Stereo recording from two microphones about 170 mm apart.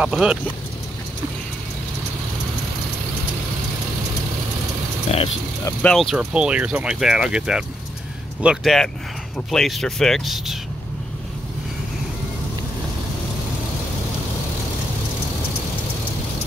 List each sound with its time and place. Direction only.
0.0 s speech: 5° right (ahead or behind)
5.1 s speech: 40° left (ahead or behind)
5.7 s speech: 5° left (ahead or behind)